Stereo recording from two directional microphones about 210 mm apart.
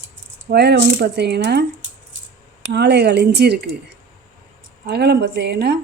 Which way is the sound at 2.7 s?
55° right (ahead or behind).